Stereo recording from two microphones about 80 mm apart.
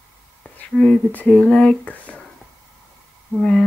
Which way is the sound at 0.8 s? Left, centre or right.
Centre.